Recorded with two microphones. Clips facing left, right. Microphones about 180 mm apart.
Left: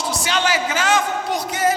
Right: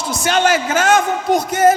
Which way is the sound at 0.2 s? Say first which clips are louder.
Right 7 dB; 50° right (ahead or behind).